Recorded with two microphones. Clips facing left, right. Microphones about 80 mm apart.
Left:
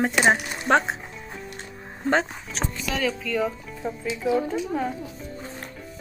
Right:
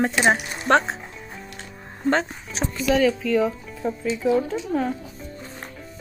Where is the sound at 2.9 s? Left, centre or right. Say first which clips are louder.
Right 7 dB; centre.